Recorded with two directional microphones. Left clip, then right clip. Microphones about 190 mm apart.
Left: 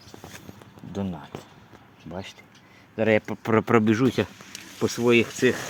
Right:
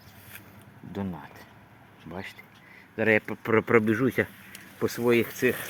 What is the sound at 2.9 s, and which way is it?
Speech, 70° left (ahead or behind).